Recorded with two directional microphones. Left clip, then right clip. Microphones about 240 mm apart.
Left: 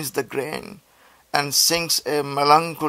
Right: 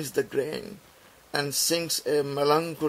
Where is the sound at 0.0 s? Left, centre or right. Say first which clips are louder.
Left 2 dB; centre.